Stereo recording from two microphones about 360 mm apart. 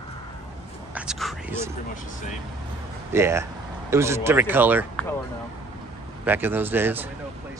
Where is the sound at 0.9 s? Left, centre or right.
Centre.